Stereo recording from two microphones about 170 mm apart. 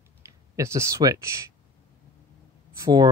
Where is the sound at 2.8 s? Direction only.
20° right (ahead or behind).